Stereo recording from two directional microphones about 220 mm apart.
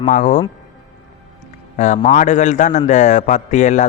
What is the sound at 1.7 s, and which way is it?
Speech, 35° left (ahead or behind).